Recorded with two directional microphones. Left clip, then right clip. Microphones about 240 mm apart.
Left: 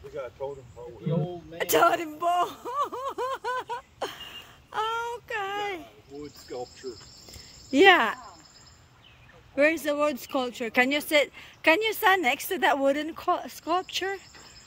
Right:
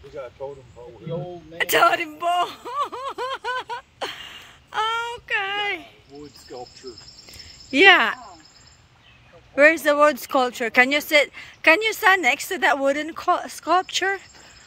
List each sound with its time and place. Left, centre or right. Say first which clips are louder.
0.1 s speech: right 2 dB; right
1.6 s a sound: right 4 dB; centre
7.7 s speech: right 4 dB; centre
9.6 s speech: right 8 dB; centre